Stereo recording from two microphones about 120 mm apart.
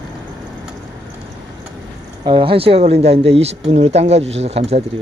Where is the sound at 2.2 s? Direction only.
45° right (ahead or behind).